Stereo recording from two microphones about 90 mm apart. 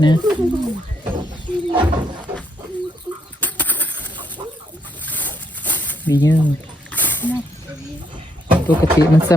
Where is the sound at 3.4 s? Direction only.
20° left (ahead or behind).